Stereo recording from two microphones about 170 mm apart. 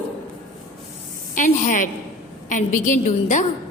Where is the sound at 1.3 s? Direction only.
50° left (ahead or behind).